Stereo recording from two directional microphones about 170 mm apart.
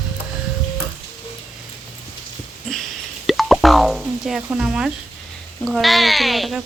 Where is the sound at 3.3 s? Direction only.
Centre (ahead or behind).